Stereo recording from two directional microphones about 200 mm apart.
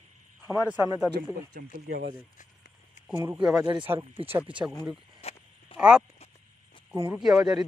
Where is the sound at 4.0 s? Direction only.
30° right (ahead or behind).